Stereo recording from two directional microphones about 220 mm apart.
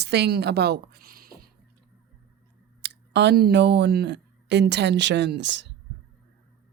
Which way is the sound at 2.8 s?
50° right (ahead or behind).